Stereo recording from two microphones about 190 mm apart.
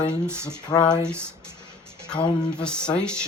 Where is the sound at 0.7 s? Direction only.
20° left (ahead or behind).